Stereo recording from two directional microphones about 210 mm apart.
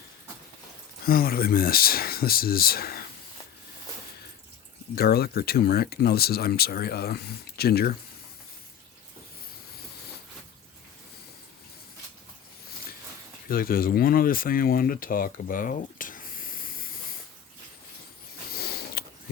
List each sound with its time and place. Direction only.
1.0 s speech: 45° left (ahead or behind)
4.9 s speech: 45° left (ahead or behind)
13.5 s speech: 45° left (ahead or behind)
18.5 s mechanisms: 50° left (ahead or behind)